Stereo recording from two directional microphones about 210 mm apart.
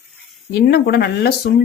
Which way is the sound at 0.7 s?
50° left (ahead or behind).